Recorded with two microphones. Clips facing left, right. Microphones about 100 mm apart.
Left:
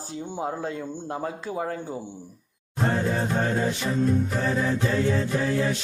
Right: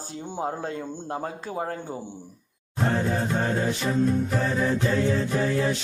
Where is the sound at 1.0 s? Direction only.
30° right (ahead or behind).